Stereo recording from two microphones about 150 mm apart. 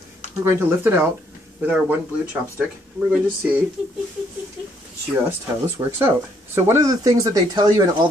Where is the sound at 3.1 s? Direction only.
10° right (ahead or behind).